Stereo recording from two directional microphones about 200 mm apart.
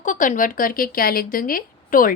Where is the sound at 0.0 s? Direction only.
40° left (ahead or behind).